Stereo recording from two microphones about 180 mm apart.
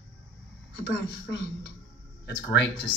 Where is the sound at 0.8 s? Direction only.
70° left (ahead or behind).